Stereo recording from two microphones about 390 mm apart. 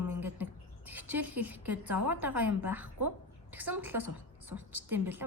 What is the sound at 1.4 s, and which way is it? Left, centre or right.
A woman's voice, centre.